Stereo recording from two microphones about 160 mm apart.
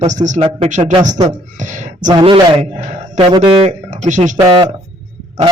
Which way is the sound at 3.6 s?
45° right (ahead or behind).